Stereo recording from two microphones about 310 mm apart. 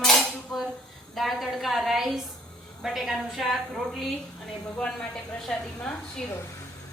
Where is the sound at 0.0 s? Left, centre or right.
Centre.